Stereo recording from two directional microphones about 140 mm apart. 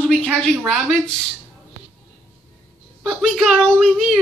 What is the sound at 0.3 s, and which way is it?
Speech, centre (ahead or behind).